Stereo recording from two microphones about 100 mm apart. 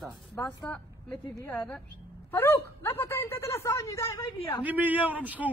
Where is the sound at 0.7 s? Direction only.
10° left (ahead or behind).